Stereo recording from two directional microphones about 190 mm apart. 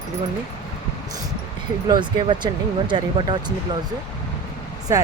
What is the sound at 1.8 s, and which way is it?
Speech, 25° right (ahead or behind).